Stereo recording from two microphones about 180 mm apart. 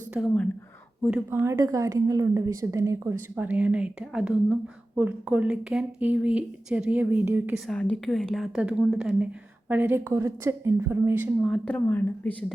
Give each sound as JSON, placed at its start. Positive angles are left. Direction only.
{"t": 0.1, "sound": "speech", "side_deg": -5}
{"t": 1.3, "sound": "a woman's voice", "side_deg": -15}
{"t": 7.7, "sound": "a woman's voice", "side_deg": 5}
{"t": 11.4, "sound": "speech", "side_deg": 5}